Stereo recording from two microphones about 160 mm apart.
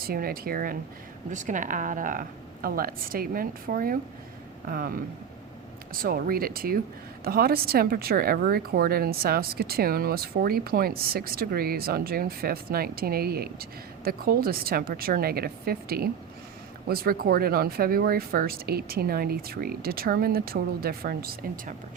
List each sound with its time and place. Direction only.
0.0 s a woman's voice: 65° right (ahead or behind)
1.3 s a woman's voice: 50° right (ahead or behind)